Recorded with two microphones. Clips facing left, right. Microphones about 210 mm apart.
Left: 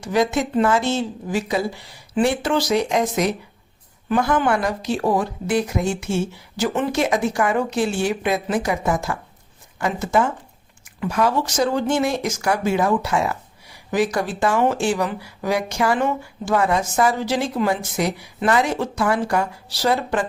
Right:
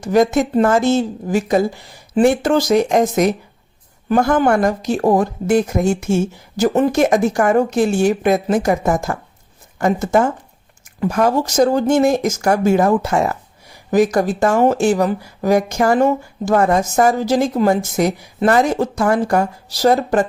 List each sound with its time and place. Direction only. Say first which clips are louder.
0.0 s speech: right 6 dB; 45° right (ahead or behind)